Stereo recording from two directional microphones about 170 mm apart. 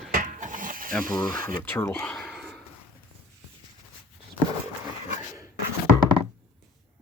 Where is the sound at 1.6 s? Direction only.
15° left (ahead or behind).